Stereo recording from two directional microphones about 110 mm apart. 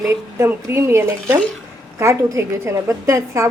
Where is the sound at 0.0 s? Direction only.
25° right (ahead or behind).